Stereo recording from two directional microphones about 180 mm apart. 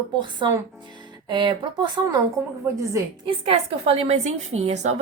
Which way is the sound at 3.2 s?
30° right (ahead or behind).